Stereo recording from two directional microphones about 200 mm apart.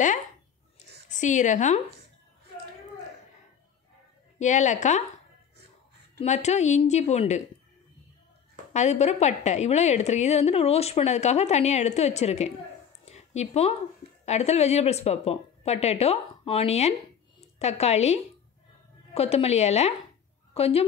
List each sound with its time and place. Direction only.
1.1 s a woman's voice: 40° left (ahead or behind)
4.4 s a woman's voice: 35° left (ahead or behind)
6.1 s a woman's voice: 35° left (ahead or behind)
8.7 s a woman's voice: 35° left (ahead or behind)
13.0 s a sound: 35° left (ahead or behind)
14.2 s a woman's voice: 35° left (ahead or behind)